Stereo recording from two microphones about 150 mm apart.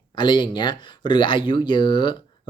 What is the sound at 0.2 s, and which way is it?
Speech, 30° left (ahead or behind).